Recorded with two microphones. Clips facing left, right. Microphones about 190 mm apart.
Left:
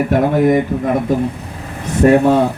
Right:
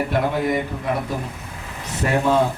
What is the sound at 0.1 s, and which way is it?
A man's voice, 50° left (ahead or behind).